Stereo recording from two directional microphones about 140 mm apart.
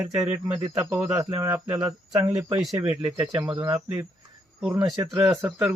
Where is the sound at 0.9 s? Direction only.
15° right (ahead or behind).